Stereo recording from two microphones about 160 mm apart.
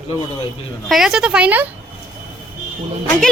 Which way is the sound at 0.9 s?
5° right (ahead or behind).